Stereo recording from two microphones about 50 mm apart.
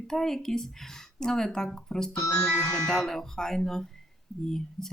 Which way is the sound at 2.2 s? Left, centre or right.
Left.